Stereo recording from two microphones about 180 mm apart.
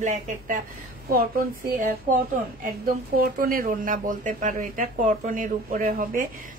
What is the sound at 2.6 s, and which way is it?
Speech, 50° right (ahead or behind).